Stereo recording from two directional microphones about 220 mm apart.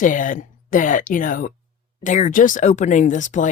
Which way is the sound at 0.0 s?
35° left (ahead or behind).